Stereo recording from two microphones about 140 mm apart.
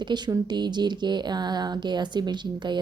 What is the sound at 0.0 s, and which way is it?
Speech, 30° right (ahead or behind).